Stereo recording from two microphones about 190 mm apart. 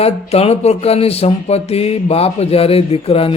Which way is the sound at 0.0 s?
30° left (ahead or behind).